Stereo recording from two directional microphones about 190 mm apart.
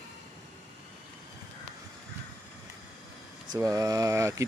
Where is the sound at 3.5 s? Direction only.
15° right (ahead or behind).